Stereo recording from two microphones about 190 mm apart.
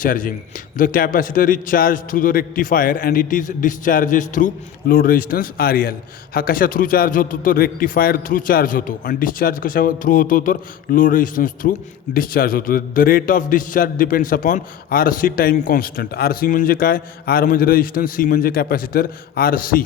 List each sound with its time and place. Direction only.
0.0 s a man's voice: 45° left (ahead or behind)